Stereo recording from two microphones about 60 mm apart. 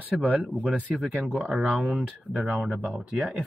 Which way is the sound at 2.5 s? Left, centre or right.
Centre.